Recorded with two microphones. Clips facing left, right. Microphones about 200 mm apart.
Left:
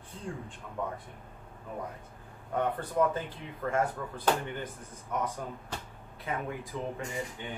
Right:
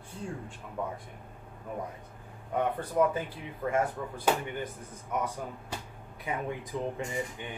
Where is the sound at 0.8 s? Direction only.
10° right (ahead or behind).